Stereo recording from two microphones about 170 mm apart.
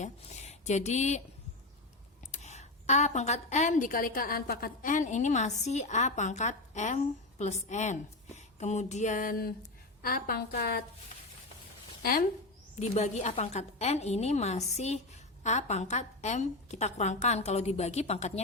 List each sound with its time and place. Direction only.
0.0 s speech: 40° left (ahead or behind)
2.3 s a woman's voice: 40° left (ahead or behind); by 10.8 s 65° left (ahead or behind)
12.7 s a woman's voice: 40° left (ahead or behind)